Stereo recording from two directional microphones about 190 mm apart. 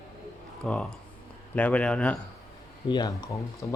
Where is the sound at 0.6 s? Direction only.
5° left (ahead or behind).